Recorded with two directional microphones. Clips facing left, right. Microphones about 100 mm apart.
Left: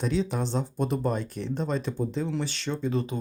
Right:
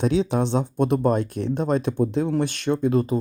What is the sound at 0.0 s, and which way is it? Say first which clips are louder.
Speech: right 6 dB; 70° right (ahead or behind).